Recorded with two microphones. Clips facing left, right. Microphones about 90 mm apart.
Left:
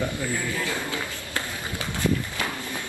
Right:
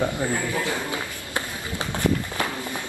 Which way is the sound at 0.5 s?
20° right (ahead or behind).